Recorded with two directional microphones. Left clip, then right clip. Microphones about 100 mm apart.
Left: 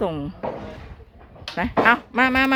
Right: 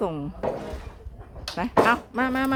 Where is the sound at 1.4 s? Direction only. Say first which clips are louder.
Left 4 dB; 20° left (ahead or behind).